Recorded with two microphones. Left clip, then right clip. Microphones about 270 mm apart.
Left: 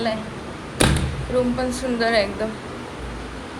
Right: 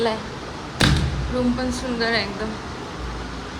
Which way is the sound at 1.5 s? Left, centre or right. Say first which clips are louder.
Left 2 dB; centre.